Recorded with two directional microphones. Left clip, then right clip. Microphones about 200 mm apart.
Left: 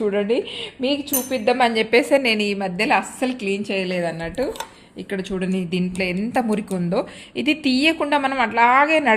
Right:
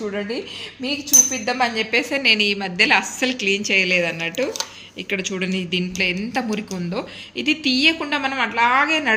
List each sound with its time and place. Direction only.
0.0 s a woman's voice: 50° left (ahead or behind)